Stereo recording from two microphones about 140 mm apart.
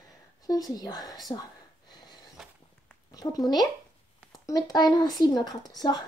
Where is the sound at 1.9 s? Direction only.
30° left (ahead or behind).